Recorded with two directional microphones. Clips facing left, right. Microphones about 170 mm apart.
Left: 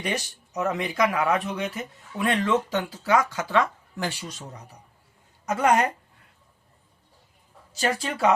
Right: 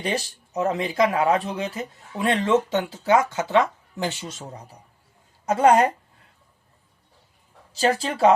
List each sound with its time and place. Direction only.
0.0 s speech: 30° right (ahead or behind)
7.7 s speech: 30° right (ahead or behind)